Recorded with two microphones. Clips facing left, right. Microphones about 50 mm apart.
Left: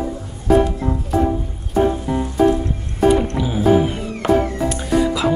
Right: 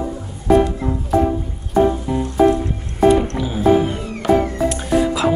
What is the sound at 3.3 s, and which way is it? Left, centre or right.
Music, centre.